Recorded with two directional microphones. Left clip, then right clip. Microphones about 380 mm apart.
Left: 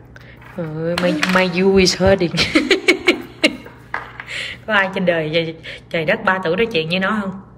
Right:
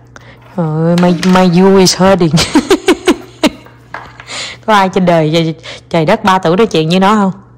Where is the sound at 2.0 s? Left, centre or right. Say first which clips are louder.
Right 5 dB; left.